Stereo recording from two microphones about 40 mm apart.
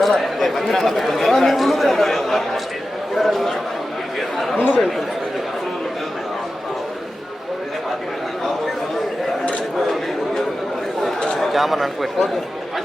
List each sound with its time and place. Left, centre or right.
0.0 s speech: centre
3.2 s a sound: centre
4.5 s chatter: right
11.3 s speech: centre